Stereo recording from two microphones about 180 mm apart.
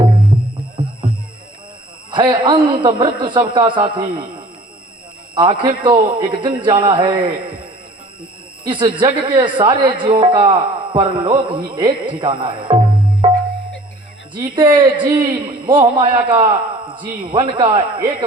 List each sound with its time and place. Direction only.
2.0 s speech: 25° right (ahead or behind)
14.3 s speech: 25° right (ahead or behind)